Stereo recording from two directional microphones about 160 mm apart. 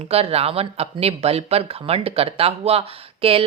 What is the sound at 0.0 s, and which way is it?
Speech, 40° right (ahead or behind).